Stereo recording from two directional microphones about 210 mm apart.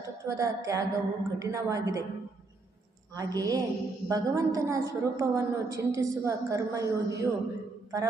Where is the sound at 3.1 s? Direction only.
15° right (ahead or behind).